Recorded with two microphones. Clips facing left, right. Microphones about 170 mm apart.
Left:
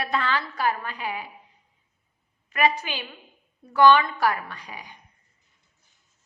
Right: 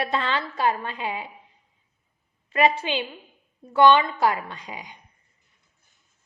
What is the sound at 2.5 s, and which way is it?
A woman's voice, 25° right (ahead or behind).